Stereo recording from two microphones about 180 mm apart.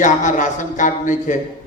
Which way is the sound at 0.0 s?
45° left (ahead or behind).